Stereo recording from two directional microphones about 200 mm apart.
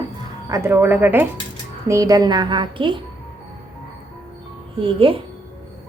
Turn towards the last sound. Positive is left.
turn(degrees=-25)  # may be behind; listen again after turning